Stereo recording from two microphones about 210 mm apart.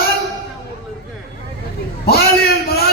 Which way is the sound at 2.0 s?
45° left (ahead or behind).